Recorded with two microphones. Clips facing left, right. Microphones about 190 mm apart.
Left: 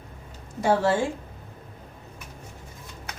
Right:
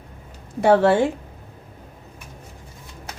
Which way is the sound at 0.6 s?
65° right (ahead or behind).